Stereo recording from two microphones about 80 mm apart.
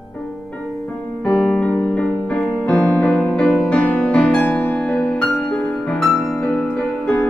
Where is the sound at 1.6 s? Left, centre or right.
Centre.